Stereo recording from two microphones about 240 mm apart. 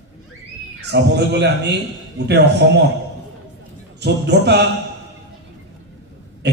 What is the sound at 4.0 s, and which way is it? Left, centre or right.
Speech, right.